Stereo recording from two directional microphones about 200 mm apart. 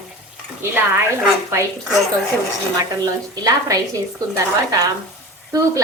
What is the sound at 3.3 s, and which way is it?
Speech, 20° right (ahead or behind).